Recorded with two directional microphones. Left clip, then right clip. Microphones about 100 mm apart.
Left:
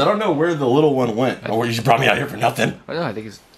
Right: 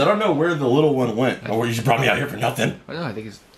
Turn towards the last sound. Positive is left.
turn(degrees=25)  # may be behind; listen again after turning